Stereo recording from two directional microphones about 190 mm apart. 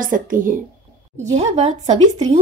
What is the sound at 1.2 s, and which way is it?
Speech, 35° right (ahead or behind).